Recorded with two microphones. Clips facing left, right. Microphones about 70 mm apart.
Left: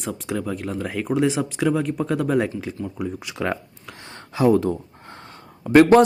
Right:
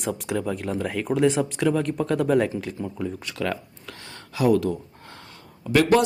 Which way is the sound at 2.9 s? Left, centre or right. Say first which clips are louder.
Left 1 dB; centre.